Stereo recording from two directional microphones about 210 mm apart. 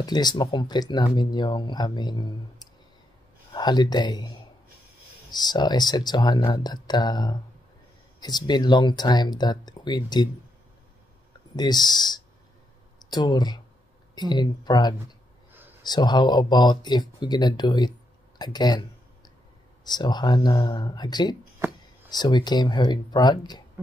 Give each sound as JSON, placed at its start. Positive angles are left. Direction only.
{"t": 0.0, "sound": "speech", "side_deg": 20}
{"t": 11.5, "sound": "speech", "side_deg": 20}
{"t": 18.4, "sound": "a sound", "side_deg": 20}
{"t": 19.9, "sound": "speech", "side_deg": 20}